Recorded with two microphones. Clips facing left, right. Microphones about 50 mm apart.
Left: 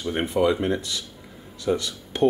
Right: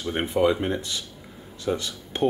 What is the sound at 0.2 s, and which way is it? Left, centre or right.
Speech, centre.